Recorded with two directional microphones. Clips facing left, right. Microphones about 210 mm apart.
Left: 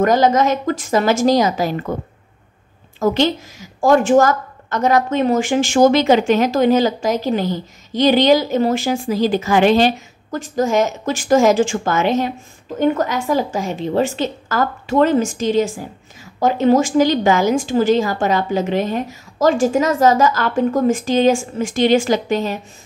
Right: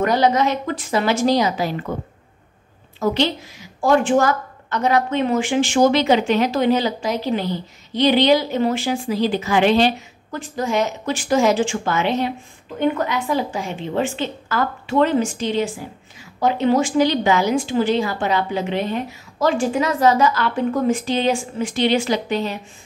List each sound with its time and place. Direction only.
0.0 s a woman's voice: 45° left (ahead or behind)
3.0 s a woman's voice: 45° left (ahead or behind)